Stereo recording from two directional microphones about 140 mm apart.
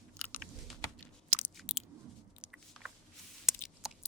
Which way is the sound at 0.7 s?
Centre (ahead or behind).